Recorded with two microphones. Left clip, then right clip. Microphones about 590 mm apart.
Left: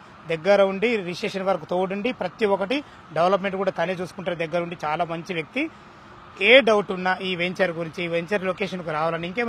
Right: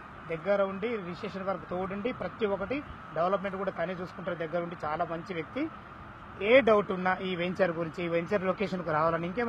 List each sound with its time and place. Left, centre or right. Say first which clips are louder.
0.3 s speech: left 10 dB; left
6.4 s speech: left 7 dB; left